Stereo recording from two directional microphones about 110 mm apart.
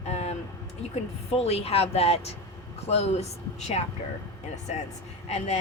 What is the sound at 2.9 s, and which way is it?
Vehicle, 75° left (ahead or behind).